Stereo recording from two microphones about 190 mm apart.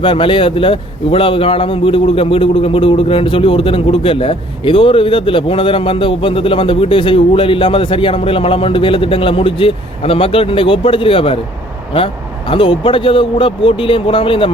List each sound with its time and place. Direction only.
0.0 s a man's voice: 25° left (ahead or behind)